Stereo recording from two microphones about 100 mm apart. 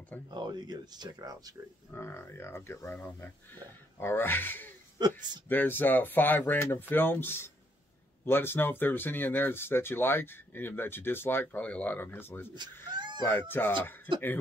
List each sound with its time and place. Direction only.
0.3 s speech: 45° right (ahead or behind)
1.9 s speech: 25° left (ahead or behind)
4.9 s speech: 45° right (ahead or behind)
5.5 s speech: 20° left (ahead or behind)
12.5 s speech: 45° right (ahead or behind)
13.2 s speech: 20° left (ahead or behind)